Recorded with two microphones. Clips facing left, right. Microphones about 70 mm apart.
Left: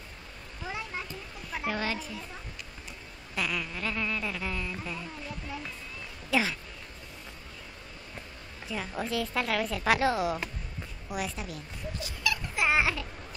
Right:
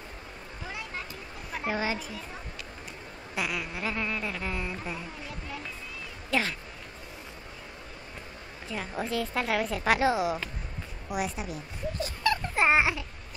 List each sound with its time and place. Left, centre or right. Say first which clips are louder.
0.7 s a sound: left 2 dB; centre
1.6 s a child's voice: right 2 dB; centre
3.3 s a sound: even; centre
4.6 s a woman's voice: right 1 dB; right
6.3 s a woman's voice: left 1 dB; centre
8.7 s a woman's voice: right 1 dB; centre
11.1 s a woman's voice: right 3 dB; right
12.0 s dog: right 5 dB; right